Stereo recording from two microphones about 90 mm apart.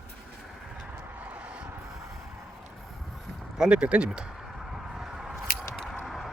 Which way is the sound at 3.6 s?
10° right (ahead or behind).